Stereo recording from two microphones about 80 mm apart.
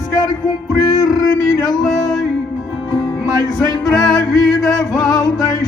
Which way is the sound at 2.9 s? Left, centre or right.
Left.